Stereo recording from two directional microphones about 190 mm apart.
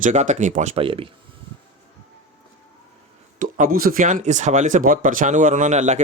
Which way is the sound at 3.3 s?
45° right (ahead or behind).